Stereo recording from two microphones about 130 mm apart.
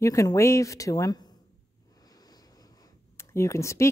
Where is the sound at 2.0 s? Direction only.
30° left (ahead or behind).